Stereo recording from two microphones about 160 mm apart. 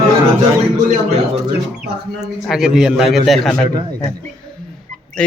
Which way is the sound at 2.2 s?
5° right (ahead or behind).